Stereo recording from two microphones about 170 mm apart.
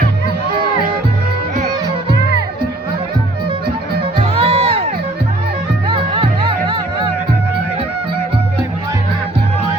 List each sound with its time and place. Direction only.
4.2 s music: 35° right (ahead or behind)
5.9 s music: 30° right (ahead or behind)